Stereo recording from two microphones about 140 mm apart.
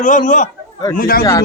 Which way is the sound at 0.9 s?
90° left.